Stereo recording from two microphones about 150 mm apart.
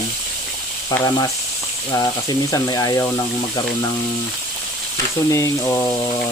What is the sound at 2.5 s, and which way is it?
Speech, 25° left (ahead or behind).